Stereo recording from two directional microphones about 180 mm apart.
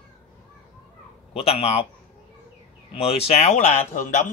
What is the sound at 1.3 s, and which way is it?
Speech, 35° left (ahead or behind).